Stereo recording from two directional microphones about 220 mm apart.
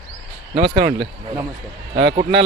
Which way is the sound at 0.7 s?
50° right (ahead or behind).